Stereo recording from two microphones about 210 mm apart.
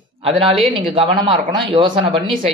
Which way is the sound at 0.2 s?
25° right (ahead or behind).